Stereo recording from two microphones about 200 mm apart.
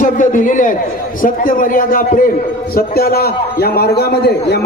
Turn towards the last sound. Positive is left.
turn(degrees=55)  # may be behind; listen again after turning